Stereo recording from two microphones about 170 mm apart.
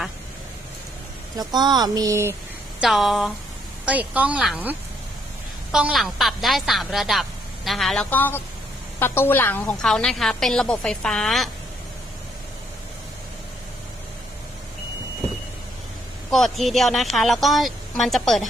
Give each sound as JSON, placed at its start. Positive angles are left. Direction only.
{"t": 1.4, "sound": "speech", "side_deg": -25}
{"t": 2.8, "sound": "speech", "side_deg": 0}
{"t": 16.3, "sound": "speech", "side_deg": 0}